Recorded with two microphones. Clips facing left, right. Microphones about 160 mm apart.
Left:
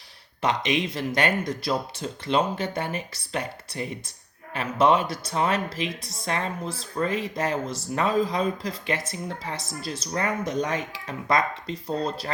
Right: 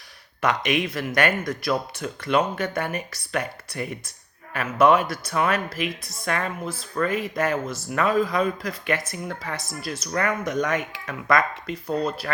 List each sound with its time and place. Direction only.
0.4 s speech: 25° left (ahead or behind)